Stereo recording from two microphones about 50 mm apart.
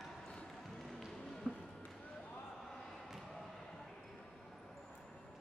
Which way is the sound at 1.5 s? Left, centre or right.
Centre.